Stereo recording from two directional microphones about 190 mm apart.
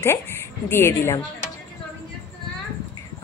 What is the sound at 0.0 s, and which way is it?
Speech, 10° left (ahead or behind).